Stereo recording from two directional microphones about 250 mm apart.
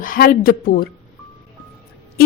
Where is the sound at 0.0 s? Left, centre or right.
Left.